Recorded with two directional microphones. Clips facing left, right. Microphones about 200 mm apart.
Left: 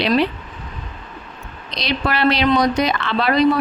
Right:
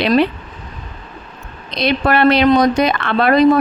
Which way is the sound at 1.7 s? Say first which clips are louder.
Right 6 dB; 55° right (ahead or behind).